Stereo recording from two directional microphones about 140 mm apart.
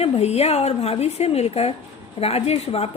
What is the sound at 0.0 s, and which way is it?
A woman's voice, 50° left (ahead or behind).